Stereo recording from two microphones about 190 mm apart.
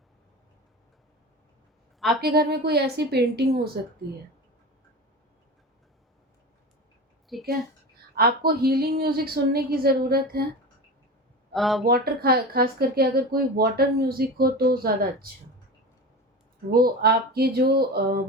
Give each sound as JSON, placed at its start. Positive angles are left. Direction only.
{"t": 2.2, "sound": "a woman's voice", "side_deg": -55}
{"t": 7.3, "sound": "speech", "side_deg": 0}
{"t": 8.1, "sound": "speech", "side_deg": -55}
{"t": 11.5, "sound": "speech", "side_deg": 0}
{"t": 11.9, "sound": "speech", "side_deg": -55}
{"t": 16.7, "sound": "a woman's voice", "side_deg": -50}